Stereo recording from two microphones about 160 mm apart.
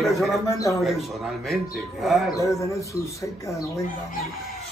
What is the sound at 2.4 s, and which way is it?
Speech, 20° left (ahead or behind).